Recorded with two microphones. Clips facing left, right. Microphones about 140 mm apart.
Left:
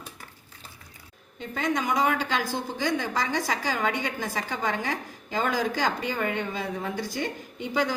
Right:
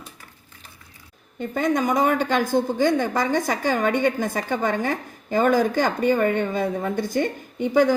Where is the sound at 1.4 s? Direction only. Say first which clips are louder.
Right 6 dB; 50° right (ahead or behind).